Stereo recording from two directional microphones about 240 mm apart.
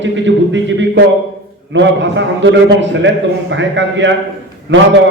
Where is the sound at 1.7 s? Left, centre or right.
Right.